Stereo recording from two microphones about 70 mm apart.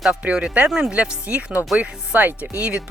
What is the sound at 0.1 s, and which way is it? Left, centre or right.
Speech, centre.